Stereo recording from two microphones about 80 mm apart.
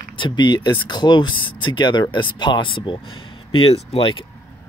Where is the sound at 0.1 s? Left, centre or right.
Left.